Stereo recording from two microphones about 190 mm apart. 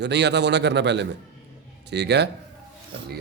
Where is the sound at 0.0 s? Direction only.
65° right (ahead or behind).